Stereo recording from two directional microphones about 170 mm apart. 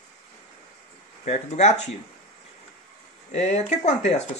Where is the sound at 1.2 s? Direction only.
40° left (ahead or behind).